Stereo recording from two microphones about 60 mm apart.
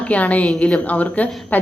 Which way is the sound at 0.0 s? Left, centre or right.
Left.